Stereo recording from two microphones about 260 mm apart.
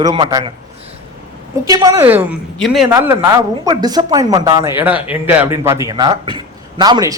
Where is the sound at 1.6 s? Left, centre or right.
Centre.